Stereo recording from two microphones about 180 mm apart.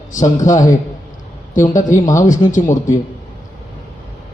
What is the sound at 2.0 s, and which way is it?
Speech, 20° left (ahead or behind).